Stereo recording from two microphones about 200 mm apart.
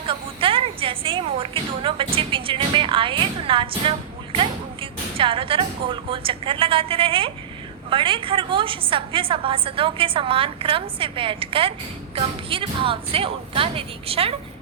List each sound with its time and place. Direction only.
0.1 s a woman's voice: 25° right (ahead or behind)